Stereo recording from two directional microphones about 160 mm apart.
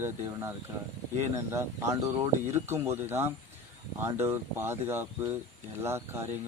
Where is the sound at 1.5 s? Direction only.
15° right (ahead or behind).